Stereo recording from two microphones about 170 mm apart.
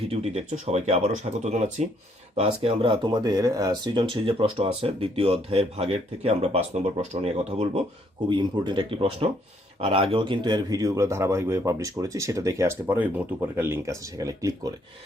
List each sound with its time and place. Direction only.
0.1 s speech: 35° right (ahead or behind); by 14.7 s 20° right (ahead or behind)